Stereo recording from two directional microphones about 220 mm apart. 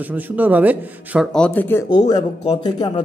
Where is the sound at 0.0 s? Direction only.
5° right (ahead or behind).